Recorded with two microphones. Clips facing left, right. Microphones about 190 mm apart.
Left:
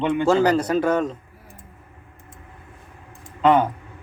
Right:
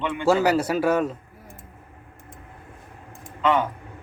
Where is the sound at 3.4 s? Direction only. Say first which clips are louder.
Left 5 dB; 45° left (ahead or behind).